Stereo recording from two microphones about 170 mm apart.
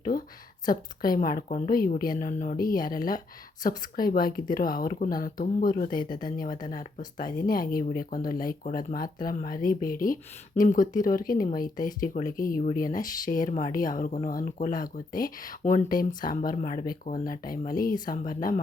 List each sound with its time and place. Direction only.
0.0 s speech: 55° left (ahead or behind)